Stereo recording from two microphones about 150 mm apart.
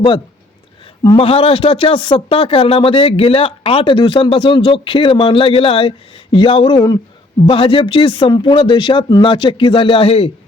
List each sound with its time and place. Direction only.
1.0 s a man's voice: 35° left (ahead or behind)